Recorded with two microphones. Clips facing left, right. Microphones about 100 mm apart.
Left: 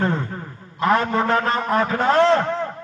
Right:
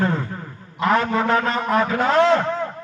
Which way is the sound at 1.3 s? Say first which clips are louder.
Even; 35° left (ahead or behind).